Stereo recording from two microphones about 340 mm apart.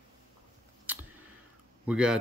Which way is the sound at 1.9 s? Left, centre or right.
Centre.